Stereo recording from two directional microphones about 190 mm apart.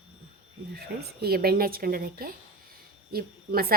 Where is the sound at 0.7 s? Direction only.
55° right (ahead or behind).